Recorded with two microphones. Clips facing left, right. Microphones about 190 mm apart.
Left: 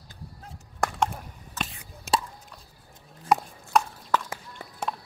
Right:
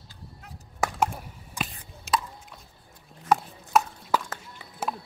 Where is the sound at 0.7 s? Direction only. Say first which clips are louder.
Right 1 dB; 5° right (ahead or behind).